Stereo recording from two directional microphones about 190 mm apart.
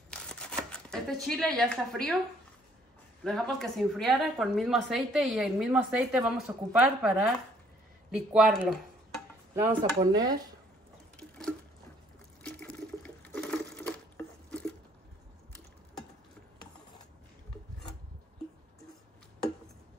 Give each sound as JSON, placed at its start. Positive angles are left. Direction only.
{"t": 0.1, "sound": "a sound", "side_deg": 5}
{"t": 3.3, "sound": "speech", "side_deg": 5}
{"t": 10.1, "sound": "speech", "side_deg": -20}
{"t": 11.1, "sound": "patter", "side_deg": 5}
{"t": 12.4, "sound": "water", "side_deg": 5}